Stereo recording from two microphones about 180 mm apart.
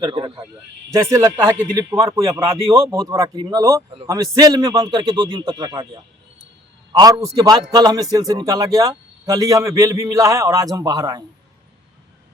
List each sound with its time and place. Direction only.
0.0 s a man's voice: 25° right (ahead or behind)
1.1 s a man's voice: 15° right (ahead or behind)